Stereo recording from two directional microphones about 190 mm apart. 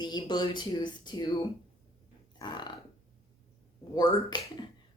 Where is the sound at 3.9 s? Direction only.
20° left (ahead or behind).